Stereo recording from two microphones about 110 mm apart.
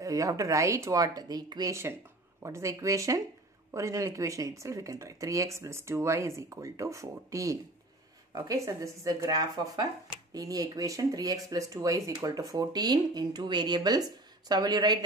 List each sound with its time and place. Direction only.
0.0 s speech: 30° right (ahead or behind)